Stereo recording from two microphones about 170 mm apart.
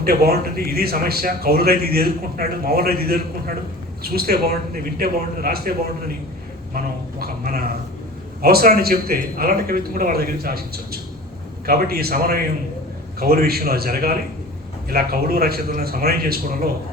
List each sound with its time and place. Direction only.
0.0 s a man's voice: 65° right (ahead or behind)
6.7 s a man's voice: 60° right (ahead or behind)